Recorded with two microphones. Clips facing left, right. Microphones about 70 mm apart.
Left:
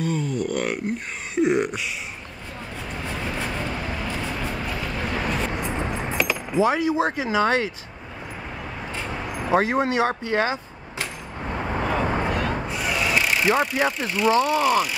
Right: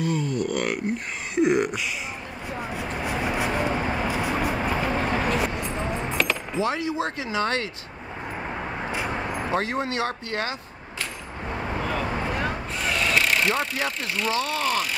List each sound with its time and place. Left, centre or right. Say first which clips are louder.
0.0 s speech: even; centre
2.7 s vehicle: right 2 dB; centre
4.1 s vehicle: right 4 dB; centre
4.6 s vehicle: right 4 dB; right
5.3 s vehicle: right 1 dB; centre
6.2 s keys jangling: left 1 dB; centre
6.5 s speech: left 5 dB; centre
8.9 s vehicle: right 2 dB; centre
9.5 s speech: left 7 dB; centre
11.6 s vehicle: left 4 dB; centre
12.6 s a sound: left 1 dB; centre
14.4 s speech: left 6 dB; centre